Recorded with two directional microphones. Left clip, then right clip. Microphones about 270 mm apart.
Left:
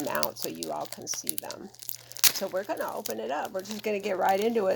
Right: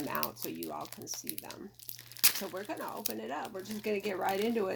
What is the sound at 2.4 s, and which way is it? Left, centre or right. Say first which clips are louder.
Speech: left 8 dB; left.